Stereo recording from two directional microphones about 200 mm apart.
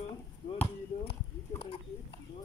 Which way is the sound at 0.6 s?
30° left (ahead or behind).